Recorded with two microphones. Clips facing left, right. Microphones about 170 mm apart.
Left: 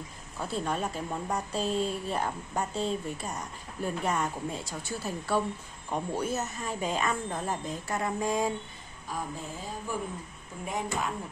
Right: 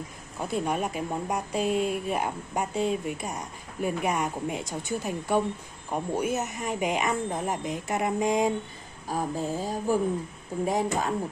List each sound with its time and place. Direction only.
0.4 s speech: 15° right (ahead or behind)
9.0 s speech: 35° right (ahead or behind)